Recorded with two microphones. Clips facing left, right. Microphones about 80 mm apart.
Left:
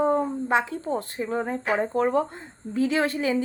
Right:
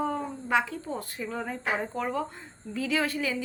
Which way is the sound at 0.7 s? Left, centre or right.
Left.